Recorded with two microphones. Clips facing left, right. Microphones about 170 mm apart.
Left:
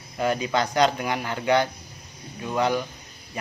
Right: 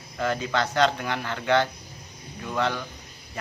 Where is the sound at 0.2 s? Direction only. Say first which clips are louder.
Left 2 dB; 15° left (ahead or behind).